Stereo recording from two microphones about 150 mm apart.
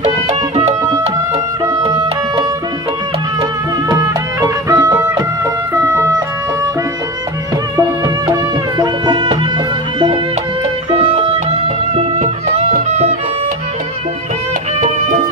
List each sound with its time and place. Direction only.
3.9 s music: 20° right (ahead or behind)
7.7 s music: 25° right (ahead or behind)
11.1 s music: 45° right (ahead or behind)